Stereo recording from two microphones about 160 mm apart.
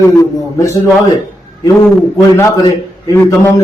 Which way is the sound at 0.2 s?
20° left (ahead or behind).